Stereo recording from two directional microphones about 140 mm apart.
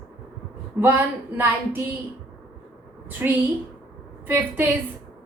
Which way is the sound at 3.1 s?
15° right (ahead or behind).